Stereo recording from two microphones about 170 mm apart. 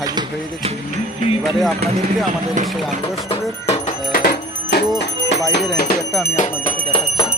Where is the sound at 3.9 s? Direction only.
55° left (ahead or behind).